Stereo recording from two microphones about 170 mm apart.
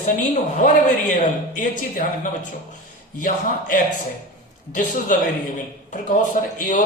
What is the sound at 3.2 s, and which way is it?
Speech, 50° left (ahead or behind).